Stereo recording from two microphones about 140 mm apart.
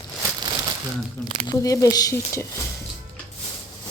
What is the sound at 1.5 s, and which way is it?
A woman's voice, 25° left (ahead or behind).